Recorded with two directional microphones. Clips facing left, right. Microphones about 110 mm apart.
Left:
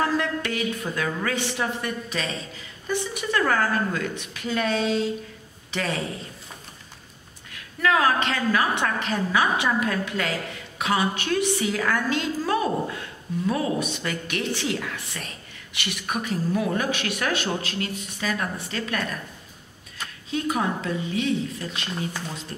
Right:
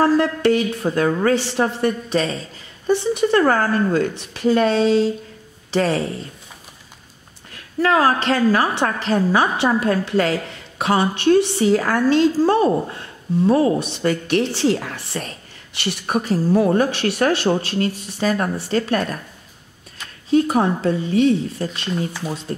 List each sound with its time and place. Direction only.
0.0 s speech: 35° right (ahead or behind)
7.5 s speech: 35° right (ahead or behind)
20.2 s speech: 35° right (ahead or behind)